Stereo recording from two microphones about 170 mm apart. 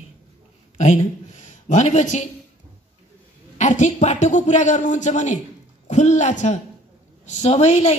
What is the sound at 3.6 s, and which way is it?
A man's voice, 45° left (ahead or behind).